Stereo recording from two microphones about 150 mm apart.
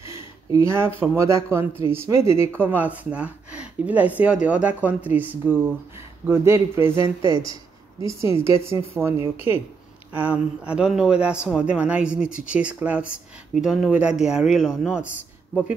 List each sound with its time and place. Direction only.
0.0 s speech: 20° right (ahead or behind)
8.0 s a woman's voice: 20° right (ahead or behind); by 15.0 s 5° right (ahead or behind)